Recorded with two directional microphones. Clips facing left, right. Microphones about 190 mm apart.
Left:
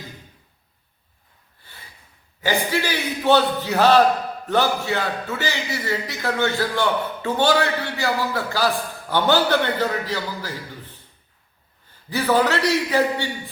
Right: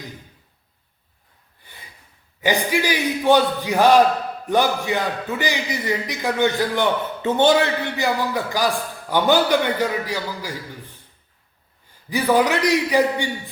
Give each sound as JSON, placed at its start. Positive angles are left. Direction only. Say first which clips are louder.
{"t": 1.6, "sound": "snort", "louder": "right 1 dB", "side_deg": -15}
{"t": 2.4, "sound": "a man's voice", "louder": "right 2 dB", "side_deg": -15}
{"t": 12.0, "sound": "a man's voice", "louder": "right 1 dB", "side_deg": -15}